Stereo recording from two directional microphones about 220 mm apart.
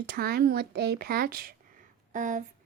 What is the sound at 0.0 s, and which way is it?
Speech, 45° right (ahead or behind).